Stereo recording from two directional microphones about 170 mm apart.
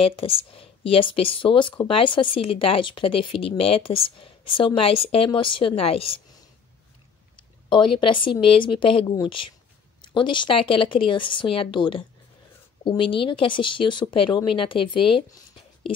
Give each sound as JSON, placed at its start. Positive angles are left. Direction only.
{"t": 0.0, "sound": "speech", "side_deg": 35}
{"t": 7.3, "sound": "speech", "side_deg": 30}